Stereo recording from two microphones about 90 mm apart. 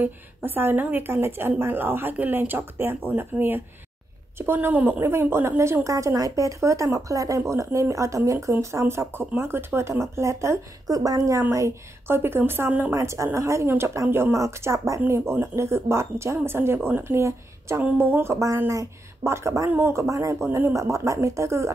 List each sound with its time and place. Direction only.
0.0 s speech: 25° right (ahead or behind)
12.9 s speech: 35° right (ahead or behind)
20.4 s speech: 25° right (ahead or behind)
20.7 s speech: 35° right (ahead or behind)